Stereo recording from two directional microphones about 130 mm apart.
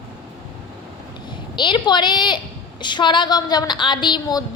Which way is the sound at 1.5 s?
35° left (ahead or behind).